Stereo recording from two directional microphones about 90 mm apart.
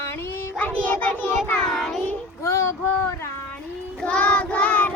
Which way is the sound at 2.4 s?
30° left (ahead or behind).